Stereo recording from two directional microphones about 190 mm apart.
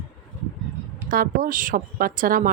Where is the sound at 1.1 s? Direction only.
45° right (ahead or behind).